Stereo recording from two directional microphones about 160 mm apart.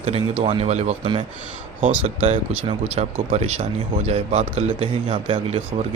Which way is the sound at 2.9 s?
40° right (ahead or behind).